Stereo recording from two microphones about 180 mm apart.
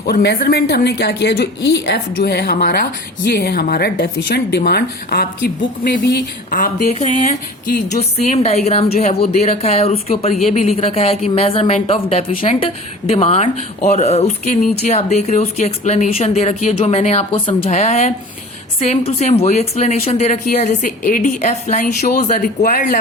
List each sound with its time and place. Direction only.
0.0 s a woman's voice: 65° left (ahead or behind)